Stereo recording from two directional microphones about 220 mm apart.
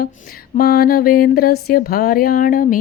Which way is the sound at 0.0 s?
40° left (ahead or behind).